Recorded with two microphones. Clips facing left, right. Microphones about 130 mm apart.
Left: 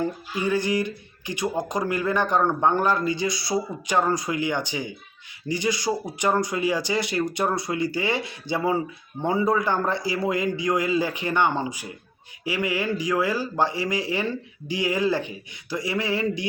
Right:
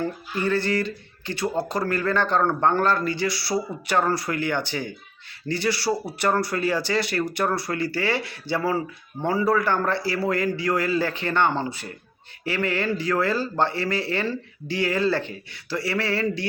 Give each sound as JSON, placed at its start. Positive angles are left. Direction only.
{"t": 0.0, "sound": "speech", "side_deg": 15}